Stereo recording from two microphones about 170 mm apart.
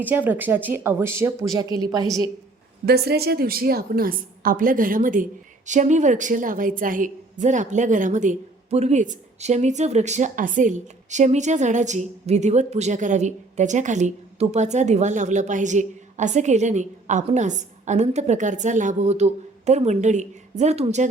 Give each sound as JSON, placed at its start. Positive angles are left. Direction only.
{"t": 0.0, "sound": "a woman's voice", "side_deg": -10}
{"t": 2.8, "sound": "a woman's voice", "side_deg": -70}